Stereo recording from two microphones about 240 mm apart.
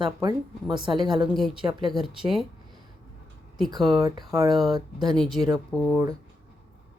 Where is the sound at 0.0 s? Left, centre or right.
Centre.